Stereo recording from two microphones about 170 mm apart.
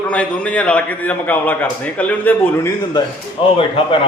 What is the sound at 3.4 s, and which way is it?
Speech, 30° left (ahead or behind).